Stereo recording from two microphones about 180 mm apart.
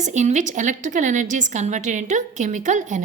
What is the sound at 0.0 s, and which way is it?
A woman's voice, 40° right (ahead or behind).